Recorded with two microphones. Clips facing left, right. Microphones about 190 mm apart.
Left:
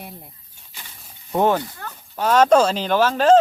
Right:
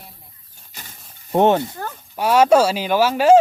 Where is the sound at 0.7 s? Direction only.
45° right (ahead or behind).